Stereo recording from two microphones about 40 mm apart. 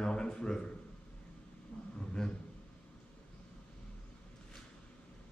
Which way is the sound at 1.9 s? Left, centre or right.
Centre.